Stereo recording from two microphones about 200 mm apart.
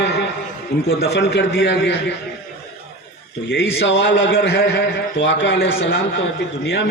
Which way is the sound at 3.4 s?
65° left (ahead or behind).